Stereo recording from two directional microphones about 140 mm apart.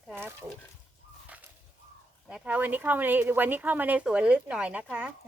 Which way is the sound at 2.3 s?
10° right (ahead or behind).